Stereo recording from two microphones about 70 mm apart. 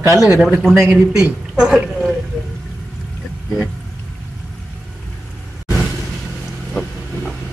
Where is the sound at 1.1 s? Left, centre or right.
Centre.